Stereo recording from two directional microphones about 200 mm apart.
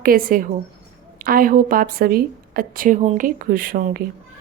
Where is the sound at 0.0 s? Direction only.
45° right (ahead or behind).